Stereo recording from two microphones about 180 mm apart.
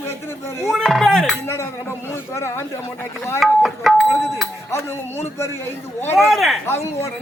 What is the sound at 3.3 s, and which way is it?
Speech, centre (ahead or behind).